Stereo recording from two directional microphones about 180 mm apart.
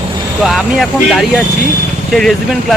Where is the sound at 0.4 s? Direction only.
Centre (ahead or behind).